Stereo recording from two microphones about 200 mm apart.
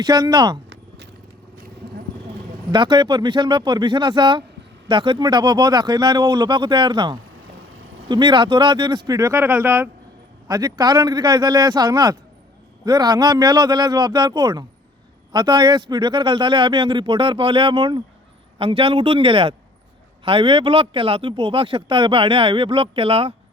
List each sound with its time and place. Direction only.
0.0 s speech: 20° right (ahead or behind)
2.7 s speech: 25° right (ahead or behind)